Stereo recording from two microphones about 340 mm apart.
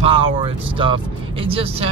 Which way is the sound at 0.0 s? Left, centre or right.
Centre.